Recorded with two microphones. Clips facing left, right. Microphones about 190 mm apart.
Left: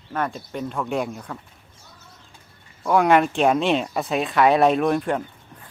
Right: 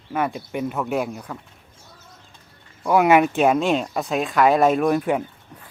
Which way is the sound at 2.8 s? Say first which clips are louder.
Right 1 dB; 5° right (ahead or behind).